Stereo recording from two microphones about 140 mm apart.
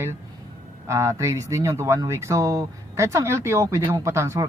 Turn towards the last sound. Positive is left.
turn(degrees=-20)  # may be behind; listen again after turning